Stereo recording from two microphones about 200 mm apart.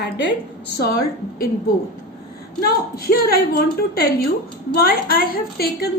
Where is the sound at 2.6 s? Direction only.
50° left (ahead or behind).